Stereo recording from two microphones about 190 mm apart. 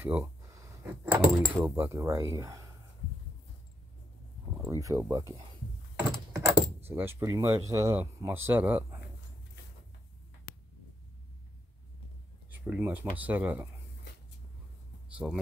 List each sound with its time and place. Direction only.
0.0 s speech: 10° right (ahead or behind)
4.8 s speech: 15° right (ahead or behind)
12.4 s a sound: 10° right (ahead or behind)
13.2 s speech: 10° right (ahead or behind)
15.2 s speech: 5° right (ahead or behind)